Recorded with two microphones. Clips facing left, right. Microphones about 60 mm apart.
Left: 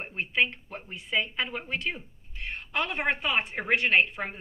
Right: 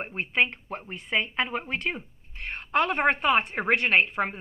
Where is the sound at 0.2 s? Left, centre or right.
Right.